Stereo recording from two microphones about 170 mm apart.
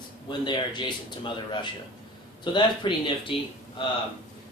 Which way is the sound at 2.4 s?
25° left (ahead or behind).